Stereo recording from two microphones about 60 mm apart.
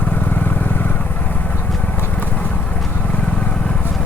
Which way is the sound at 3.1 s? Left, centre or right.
Left.